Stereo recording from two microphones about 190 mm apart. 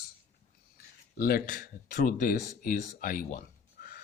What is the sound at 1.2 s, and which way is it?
Speech, 50° left (ahead or behind).